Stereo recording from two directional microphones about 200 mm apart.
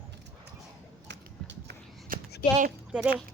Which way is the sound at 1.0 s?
60° right (ahead or behind).